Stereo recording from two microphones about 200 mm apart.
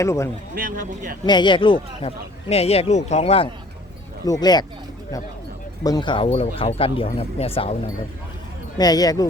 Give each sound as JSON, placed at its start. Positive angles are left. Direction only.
{"t": 0.0, "sound": "speech", "side_deg": 15}
{"t": 0.5, "sound": "speech", "side_deg": -45}
{"t": 1.2, "sound": "speech", "side_deg": 20}
{"t": 5.8, "sound": "speech", "side_deg": 20}
{"t": 8.8, "sound": "speech", "side_deg": 20}